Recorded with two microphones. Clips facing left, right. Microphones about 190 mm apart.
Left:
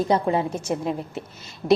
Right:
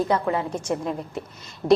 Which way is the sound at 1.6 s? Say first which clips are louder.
Right 1 dB; 35° right (ahead or behind).